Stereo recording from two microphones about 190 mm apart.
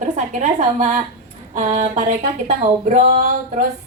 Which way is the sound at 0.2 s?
40° right (ahead or behind).